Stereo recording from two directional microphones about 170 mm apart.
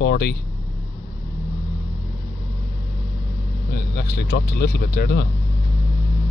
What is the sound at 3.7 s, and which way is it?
Speech, 70° left (ahead or behind).